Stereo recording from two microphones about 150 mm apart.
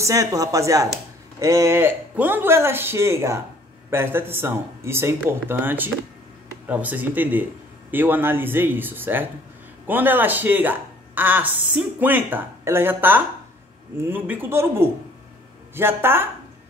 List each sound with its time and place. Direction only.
0.0 s speech: 20° right (ahead or behind)